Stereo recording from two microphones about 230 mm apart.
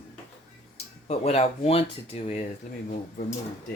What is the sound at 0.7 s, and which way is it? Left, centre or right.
Speech, left.